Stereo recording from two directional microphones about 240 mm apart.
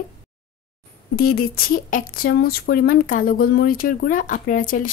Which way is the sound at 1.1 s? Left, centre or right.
Left.